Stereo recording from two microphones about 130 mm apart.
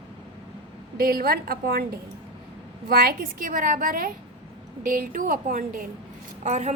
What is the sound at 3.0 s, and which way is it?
A woman's voice, 90° right.